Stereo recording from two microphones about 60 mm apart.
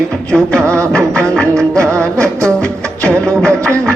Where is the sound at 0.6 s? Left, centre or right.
Right.